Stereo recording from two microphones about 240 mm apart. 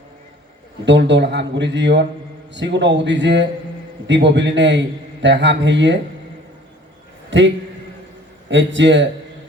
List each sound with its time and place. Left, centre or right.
0.9 s a man's voice: right
7.3 s a man's voice: right